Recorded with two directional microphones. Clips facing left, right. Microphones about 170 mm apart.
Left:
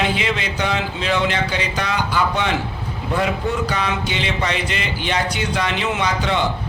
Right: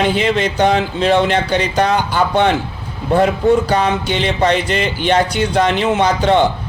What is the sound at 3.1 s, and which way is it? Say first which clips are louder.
Speech: right 9 dB; 35° right (ahead or behind).